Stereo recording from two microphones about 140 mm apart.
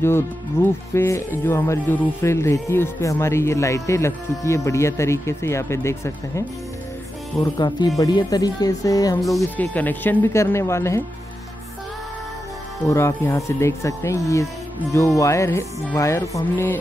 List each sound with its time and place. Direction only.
0.0 s speech: 15° left (ahead or behind)
7.5 s speech: 30° left (ahead or behind)
9.6 s speech: 10° left (ahead or behind)
12.8 s speech: 20° left (ahead or behind)